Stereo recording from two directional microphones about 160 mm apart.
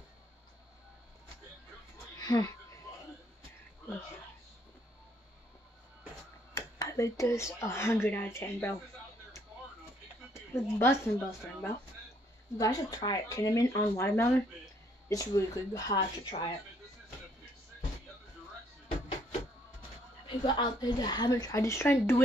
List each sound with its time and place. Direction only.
2.1 s a sound: 25° left (ahead or behind)
6.5 s speech: 20° left (ahead or behind)
10.3 s speech: 15° left (ahead or behind)
20.2 s speech: 30° left (ahead or behind)